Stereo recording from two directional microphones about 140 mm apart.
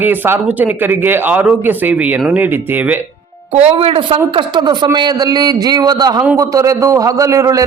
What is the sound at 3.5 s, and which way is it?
A man's voice, 45° right (ahead or behind).